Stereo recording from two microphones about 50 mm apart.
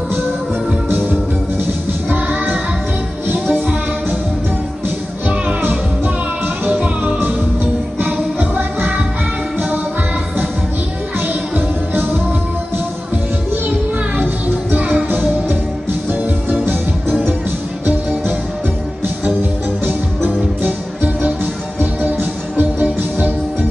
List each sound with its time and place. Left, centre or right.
0.8 s music: right
5.6 s music: right
11.1 s music: right
14.1 s music: right
19.8 s music: right